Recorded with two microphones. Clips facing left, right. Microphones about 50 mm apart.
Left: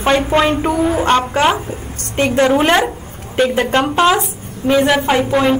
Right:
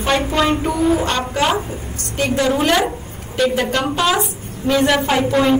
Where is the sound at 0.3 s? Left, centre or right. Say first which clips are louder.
Left 3 dB; left.